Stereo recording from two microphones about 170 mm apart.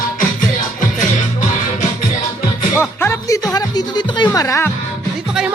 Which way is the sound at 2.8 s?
15° left (ahead or behind).